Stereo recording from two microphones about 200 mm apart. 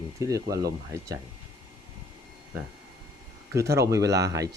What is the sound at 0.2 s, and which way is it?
Speech, 15° right (ahead or behind).